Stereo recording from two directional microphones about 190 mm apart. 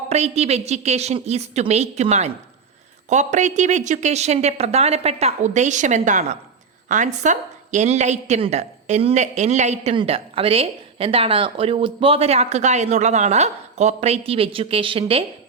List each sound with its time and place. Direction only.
0.1 s a woman's voice: 35° right (ahead or behind)